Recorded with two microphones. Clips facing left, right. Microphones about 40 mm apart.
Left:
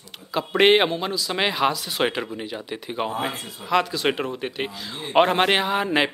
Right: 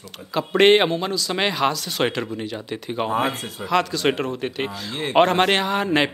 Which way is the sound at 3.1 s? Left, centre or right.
Right.